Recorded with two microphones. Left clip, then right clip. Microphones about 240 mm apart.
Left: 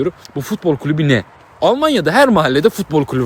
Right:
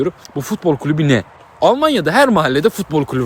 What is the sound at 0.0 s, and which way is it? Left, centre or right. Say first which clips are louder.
Speech: even; centre.